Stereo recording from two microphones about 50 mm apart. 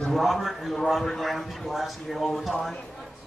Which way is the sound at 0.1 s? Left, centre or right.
Centre.